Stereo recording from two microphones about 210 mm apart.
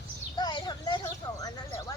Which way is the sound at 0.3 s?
20° left (ahead or behind).